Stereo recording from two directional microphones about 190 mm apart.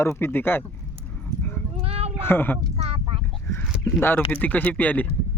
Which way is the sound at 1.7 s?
35° right (ahead or behind).